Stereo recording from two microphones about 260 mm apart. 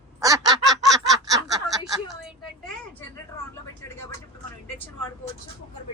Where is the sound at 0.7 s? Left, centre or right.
Centre.